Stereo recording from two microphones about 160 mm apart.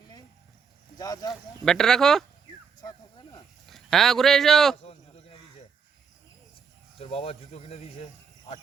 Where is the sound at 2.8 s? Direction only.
25° left (ahead or behind).